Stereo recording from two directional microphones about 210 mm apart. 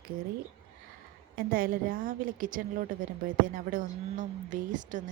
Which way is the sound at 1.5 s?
45° right (ahead or behind).